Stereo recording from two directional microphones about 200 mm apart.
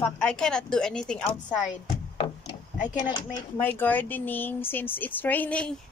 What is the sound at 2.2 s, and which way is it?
Speech, 30° left (ahead or behind).